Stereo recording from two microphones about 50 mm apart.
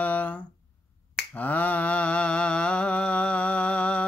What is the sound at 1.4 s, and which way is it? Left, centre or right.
Mantra, left.